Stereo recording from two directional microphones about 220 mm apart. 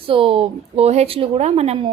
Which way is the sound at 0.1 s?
25° right (ahead or behind).